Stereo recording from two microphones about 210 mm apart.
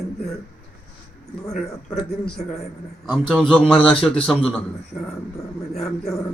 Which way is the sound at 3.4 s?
5° left (ahead or behind).